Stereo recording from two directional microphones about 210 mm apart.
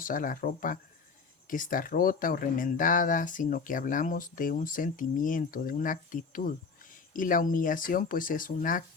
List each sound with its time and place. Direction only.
0.0 s speech: 40° left (ahead or behind)